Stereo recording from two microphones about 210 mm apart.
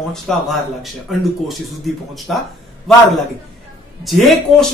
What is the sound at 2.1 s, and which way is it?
Speech, centre (ahead or behind).